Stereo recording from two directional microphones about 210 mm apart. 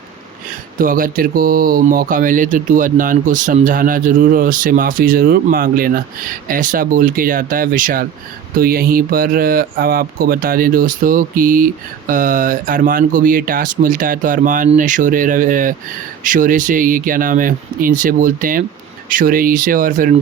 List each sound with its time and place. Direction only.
0.8 s speech: 40° right (ahead or behind)